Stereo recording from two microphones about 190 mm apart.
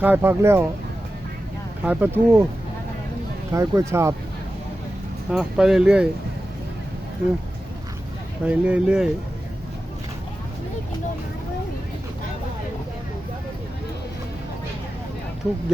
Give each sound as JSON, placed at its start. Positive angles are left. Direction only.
{"t": 0.0, "sound": "speech", "side_deg": -10}
{"t": 1.8, "sound": "speech", "side_deg": -10}
{"t": 3.5, "sound": "speech", "side_deg": -15}
{"t": 5.3, "sound": "speech", "side_deg": -5}
{"t": 8.4, "sound": "speech", "side_deg": -5}